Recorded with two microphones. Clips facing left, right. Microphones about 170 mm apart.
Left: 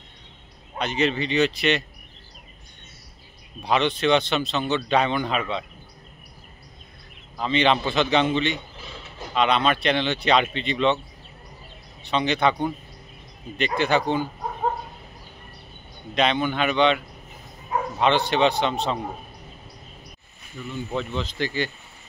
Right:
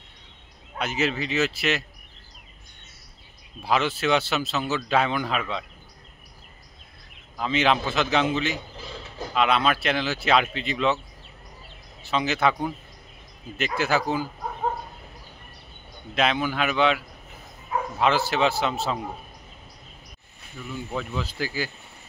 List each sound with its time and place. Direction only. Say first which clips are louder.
0.7 s speech: left 3 dB; 5° right (ahead or behind)
3.6 s speech: left 2 dB; 5° right (ahead or behind)
7.3 s speech: left 2 dB; 5° right (ahead or behind)
12.0 s speech: left 2 dB; 5° right (ahead or behind)
16.2 s speech: left 2 dB; 5° right (ahead or behind)
20.7 s speech: left 2 dB; 5° right (ahead or behind)